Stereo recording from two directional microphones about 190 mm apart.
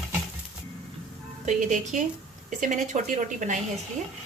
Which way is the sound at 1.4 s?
40° right (ahead or behind).